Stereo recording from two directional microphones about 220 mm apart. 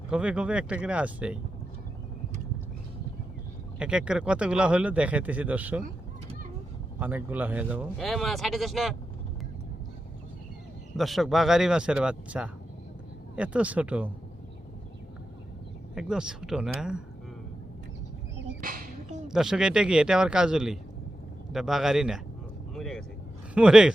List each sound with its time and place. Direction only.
0.1 s speech: 5° right (ahead or behind)
3.8 s speech: 5° right (ahead or behind)
7.0 s speech: 10° right (ahead or behind)
10.9 s speech: centre (ahead or behind)
16.0 s speech: 5° right (ahead or behind)
18.6 s music: 40° right (ahead or behind)
19.3 s speech: centre (ahead or behind)